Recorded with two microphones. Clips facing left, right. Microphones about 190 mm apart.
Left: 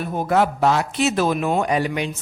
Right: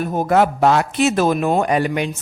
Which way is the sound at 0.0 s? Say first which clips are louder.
Right 3 dB; 45° right (ahead or behind).